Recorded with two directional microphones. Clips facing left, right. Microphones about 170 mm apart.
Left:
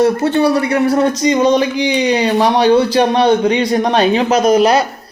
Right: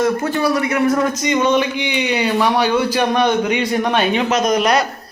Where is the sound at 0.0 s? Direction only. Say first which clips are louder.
Left 5 dB; 30° left (ahead or behind).